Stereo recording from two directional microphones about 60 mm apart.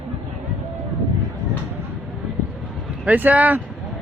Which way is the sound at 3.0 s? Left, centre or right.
Right.